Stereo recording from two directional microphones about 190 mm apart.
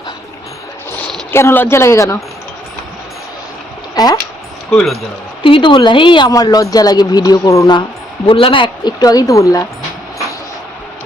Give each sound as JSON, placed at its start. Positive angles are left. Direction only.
{"t": 1.3, "sound": "a woman's voice", "side_deg": 15}
{"t": 3.9, "sound": "speech", "side_deg": 20}
{"t": 5.4, "sound": "speech", "side_deg": 25}